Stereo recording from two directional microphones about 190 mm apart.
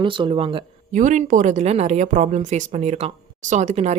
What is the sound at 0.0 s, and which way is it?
Speech, 25° right (ahead or behind).